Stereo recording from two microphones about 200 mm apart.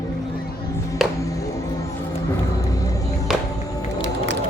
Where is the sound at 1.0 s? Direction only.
Centre (ahead or behind).